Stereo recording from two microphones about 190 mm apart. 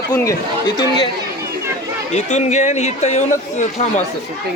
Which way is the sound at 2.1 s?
35° left (ahead or behind).